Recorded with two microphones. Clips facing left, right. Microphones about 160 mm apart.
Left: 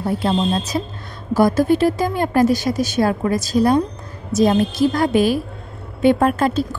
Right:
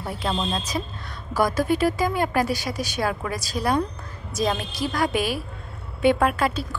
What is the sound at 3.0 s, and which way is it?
A woman's voice, 30° left (ahead or behind).